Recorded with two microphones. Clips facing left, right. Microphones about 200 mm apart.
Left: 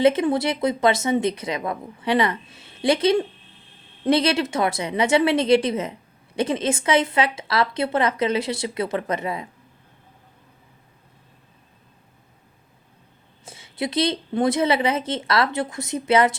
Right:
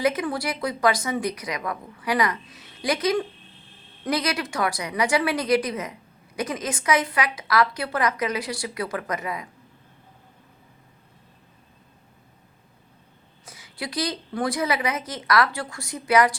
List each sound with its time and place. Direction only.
0.0 s speech: 25° left (ahead or behind)
13.4 s speech: 25° left (ahead or behind)